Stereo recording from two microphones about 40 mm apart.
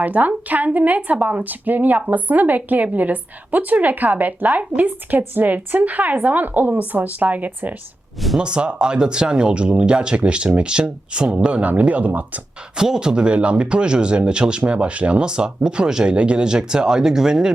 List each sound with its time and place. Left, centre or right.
0.0 s a woman's voice: right
8.4 s speech: right
12.7 s speech: centre